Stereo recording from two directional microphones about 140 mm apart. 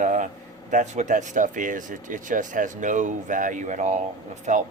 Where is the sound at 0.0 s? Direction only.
65° right (ahead or behind).